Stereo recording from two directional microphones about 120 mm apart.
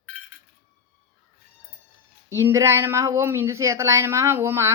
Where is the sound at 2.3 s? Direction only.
25° right (ahead or behind).